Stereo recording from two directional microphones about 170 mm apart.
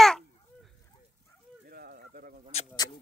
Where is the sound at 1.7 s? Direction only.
60° right (ahead or behind).